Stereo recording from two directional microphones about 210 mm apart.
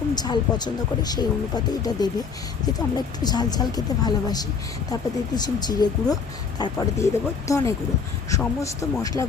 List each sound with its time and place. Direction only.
0.1 s speech: 20° left (ahead or behind)